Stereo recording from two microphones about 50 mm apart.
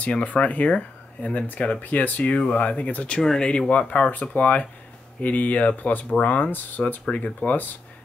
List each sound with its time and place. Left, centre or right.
0.0 s speech: left
3.2 s speech: centre
7.4 s speech: left